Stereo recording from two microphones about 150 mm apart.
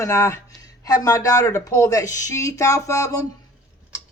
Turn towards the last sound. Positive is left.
turn(degrees=20)  # may be behind; listen again after turning